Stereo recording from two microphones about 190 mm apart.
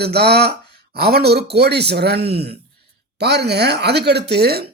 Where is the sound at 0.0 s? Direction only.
60° right (ahead or behind).